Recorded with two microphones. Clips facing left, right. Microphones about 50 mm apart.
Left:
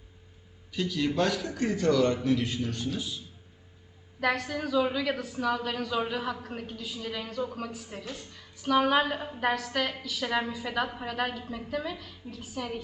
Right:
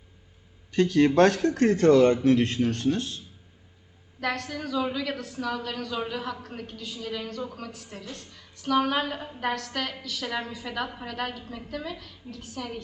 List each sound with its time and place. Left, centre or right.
0.7 s a man's voice: right
2.2 s a man's voice: right
4.2 s a woman's voice: centre